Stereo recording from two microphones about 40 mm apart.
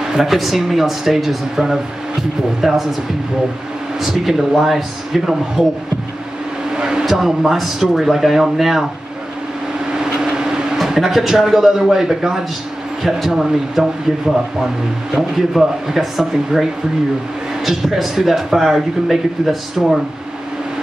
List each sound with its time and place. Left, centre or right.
0.1 s a man's voice: centre
4.0 s a man's voice: centre
6.7 s a sound: centre
7.1 s speech: centre
10.2 s vehicle: centre
11.0 s a man's voice: centre
15.1 s a man's voice: centre
17.6 s speech: centre